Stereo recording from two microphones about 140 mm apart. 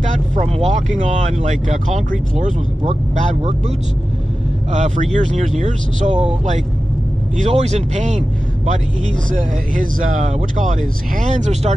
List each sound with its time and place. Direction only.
0.4 s speech: 50° right (ahead or behind)
7.3 s speech: 55° right (ahead or behind)
9.3 s speech: 70° right (ahead or behind)